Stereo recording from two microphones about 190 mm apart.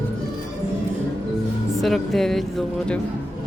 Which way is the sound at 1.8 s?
Centre (ahead or behind).